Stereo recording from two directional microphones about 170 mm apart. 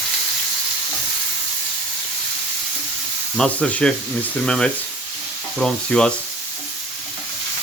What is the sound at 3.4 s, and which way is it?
Speech, 5° left (ahead or behind).